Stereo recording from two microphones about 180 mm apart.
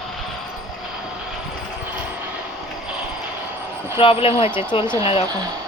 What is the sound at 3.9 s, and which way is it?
Speech, 30° left (ahead or behind).